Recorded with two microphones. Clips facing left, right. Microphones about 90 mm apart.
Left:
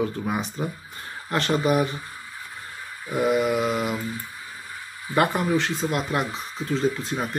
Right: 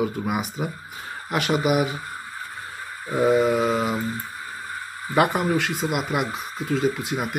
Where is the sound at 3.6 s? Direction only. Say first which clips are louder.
Right 2 dB; 20° right (ahead or behind).